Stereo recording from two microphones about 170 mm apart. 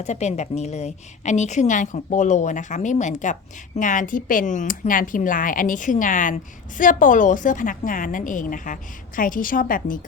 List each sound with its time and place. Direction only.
0.0 s speech: 40° left (ahead or behind)